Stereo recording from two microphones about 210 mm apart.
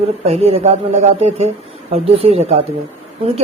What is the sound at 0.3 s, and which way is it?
Speech, 30° right (ahead or behind).